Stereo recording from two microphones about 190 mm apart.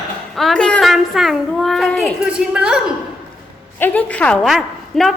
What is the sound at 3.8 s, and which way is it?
A woman's voice, 5° left (ahead or behind).